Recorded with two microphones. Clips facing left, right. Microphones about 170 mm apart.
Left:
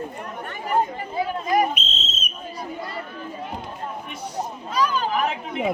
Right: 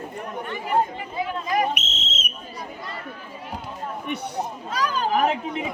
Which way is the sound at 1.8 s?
90° right.